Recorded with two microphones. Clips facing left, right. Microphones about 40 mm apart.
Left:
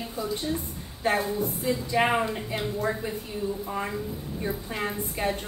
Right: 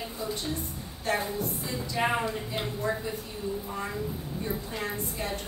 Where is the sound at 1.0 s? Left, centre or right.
Left.